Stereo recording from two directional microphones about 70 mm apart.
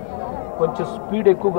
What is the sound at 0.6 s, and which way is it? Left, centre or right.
Speech, centre.